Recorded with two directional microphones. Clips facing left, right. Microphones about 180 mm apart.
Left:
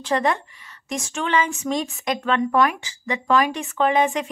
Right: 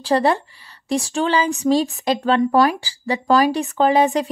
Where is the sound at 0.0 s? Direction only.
35° right (ahead or behind).